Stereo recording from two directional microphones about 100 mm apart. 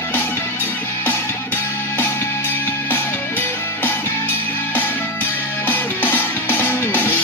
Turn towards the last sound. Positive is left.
turn(degrees=20)  # may be behind; listen again after turning